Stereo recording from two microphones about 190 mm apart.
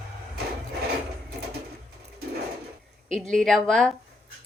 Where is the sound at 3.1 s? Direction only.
Centre (ahead or behind).